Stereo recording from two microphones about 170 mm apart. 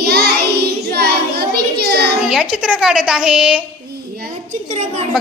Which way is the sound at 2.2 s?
5° right (ahead or behind).